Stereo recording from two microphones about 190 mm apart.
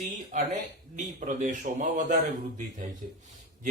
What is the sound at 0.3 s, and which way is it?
Speech, 40° right (ahead or behind).